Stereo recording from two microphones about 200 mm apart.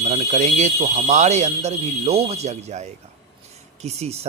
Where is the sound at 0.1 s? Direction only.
35° right (ahead or behind).